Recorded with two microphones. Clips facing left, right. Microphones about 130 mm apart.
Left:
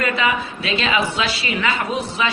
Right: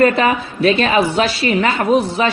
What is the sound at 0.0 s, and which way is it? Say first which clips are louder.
A woman's voice: right 7 dB; 45° right (ahead or behind).